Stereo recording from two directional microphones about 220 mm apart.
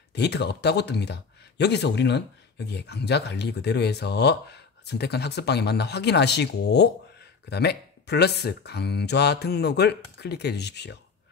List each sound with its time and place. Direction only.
0.1 s speech: 50° left (ahead or behind)